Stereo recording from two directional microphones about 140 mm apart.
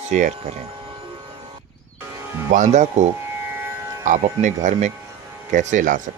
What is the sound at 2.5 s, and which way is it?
Speech, 60° right (ahead or behind).